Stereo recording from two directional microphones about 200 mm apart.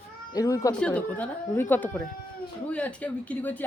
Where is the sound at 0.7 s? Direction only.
5° left (ahead or behind).